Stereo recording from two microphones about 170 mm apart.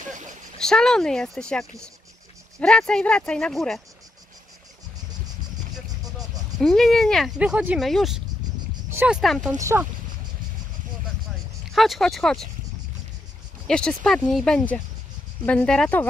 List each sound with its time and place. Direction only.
0.6 s speech: 5° left (ahead or behind)
6.1 s speech: centre (ahead or behind)
9.6 s speech: 15° right (ahead or behind)
11.7 s speech: centre (ahead or behind)
13.7 s speech: 5° left (ahead or behind)